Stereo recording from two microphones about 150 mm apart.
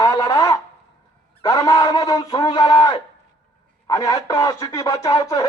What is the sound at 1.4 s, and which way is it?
Speech, 25° left (ahead or behind).